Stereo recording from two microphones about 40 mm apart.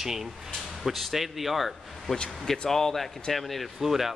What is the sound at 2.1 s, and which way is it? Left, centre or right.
Speech, left.